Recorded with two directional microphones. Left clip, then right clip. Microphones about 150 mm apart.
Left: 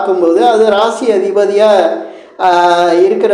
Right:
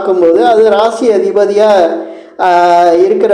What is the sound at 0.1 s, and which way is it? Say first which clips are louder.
A woman's voice: right 3 dB; 40° right (ahead or behind).